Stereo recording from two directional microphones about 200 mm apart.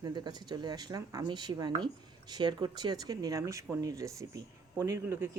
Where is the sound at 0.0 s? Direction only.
20° right (ahead or behind).